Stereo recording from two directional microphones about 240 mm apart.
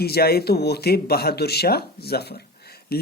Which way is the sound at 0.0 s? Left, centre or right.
Left.